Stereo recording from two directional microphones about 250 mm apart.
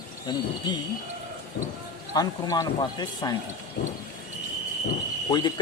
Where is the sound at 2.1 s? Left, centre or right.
Centre.